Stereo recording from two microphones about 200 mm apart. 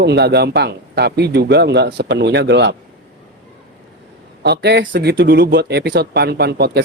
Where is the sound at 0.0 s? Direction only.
55° right (ahead or behind).